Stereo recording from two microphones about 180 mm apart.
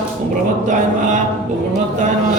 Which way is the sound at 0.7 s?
45° right (ahead or behind).